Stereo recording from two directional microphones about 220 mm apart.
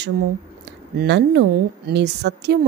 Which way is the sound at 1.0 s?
50° right (ahead or behind).